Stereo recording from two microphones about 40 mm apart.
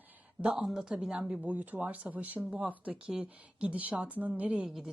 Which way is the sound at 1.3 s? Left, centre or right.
Right.